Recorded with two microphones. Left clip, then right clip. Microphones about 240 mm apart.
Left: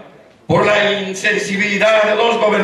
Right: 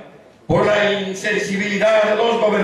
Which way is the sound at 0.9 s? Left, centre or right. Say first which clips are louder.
Left 3 dB; centre.